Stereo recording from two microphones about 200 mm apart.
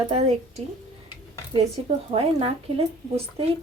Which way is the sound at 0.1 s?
35° right (ahead or behind).